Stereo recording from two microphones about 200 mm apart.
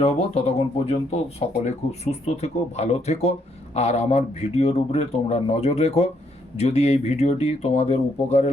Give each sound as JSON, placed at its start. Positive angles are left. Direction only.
{"t": 0.0, "sound": "speech", "side_deg": 30}